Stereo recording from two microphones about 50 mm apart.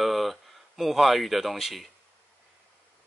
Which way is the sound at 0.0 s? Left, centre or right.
Centre.